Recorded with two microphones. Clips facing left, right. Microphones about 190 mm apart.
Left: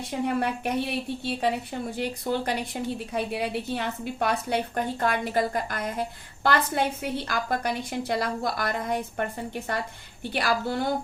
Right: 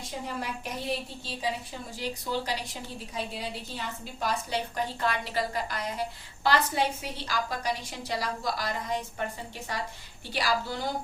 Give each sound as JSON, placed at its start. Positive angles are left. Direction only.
{"t": 0.3, "sound": "a woman's voice", "side_deg": 60}